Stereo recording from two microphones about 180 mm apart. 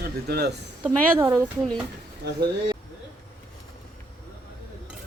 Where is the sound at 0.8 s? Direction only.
15° right (ahead or behind).